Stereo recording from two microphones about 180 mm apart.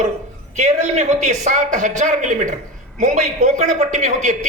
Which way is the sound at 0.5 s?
40° right (ahead or behind).